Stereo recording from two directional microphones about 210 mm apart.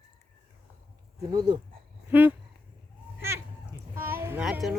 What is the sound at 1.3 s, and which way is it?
Speech, 20° right (ahead or behind).